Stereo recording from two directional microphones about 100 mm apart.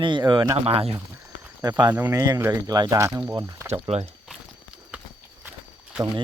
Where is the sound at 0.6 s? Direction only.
75° right (ahead or behind).